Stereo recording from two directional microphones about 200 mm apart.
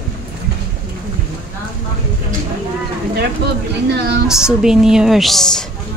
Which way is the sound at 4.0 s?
55° right (ahead or behind).